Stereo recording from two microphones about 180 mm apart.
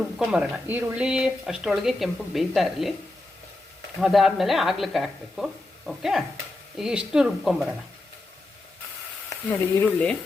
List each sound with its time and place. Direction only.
0.2 s speech: 5° right (ahead or behind)
4.0 s speech: centre (ahead or behind)
9.3 s frying: 10° left (ahead or behind)